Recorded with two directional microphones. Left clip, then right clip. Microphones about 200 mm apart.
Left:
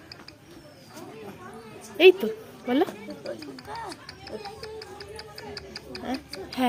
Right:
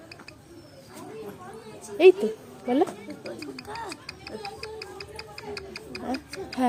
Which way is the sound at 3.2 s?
20° right (ahead or behind).